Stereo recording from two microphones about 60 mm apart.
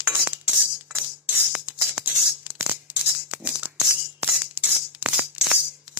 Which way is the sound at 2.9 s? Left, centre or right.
Right.